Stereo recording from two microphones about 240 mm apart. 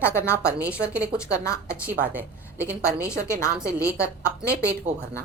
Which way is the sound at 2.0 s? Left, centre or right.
Centre.